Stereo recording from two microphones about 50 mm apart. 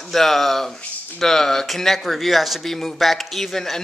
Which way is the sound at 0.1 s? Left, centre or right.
Centre.